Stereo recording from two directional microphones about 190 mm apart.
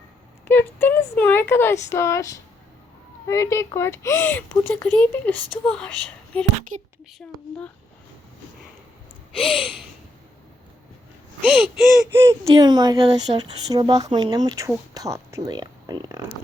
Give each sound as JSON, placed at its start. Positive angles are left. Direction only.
{"t": 0.4, "sound": "speech", "side_deg": 10}
{"t": 6.7, "sound": "speech", "side_deg": -45}
{"t": 9.4, "sound": "speech", "side_deg": 0}
{"t": 11.5, "sound": "speech", "side_deg": 0}
{"t": 12.1, "sound": "speech", "side_deg": -15}